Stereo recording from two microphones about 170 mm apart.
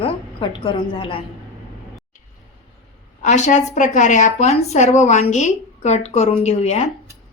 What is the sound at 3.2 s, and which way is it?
A woman's voice, 45° left (ahead or behind).